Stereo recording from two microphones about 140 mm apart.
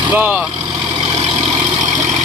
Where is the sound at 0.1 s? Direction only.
10° right (ahead or behind).